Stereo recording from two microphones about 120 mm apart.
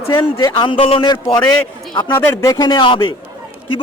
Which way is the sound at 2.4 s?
30° left (ahead or behind).